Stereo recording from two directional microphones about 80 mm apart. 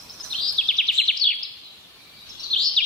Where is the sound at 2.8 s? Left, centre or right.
Centre.